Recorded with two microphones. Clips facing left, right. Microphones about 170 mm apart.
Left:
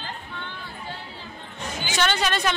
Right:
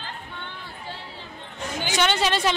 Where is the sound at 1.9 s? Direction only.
25° right (ahead or behind).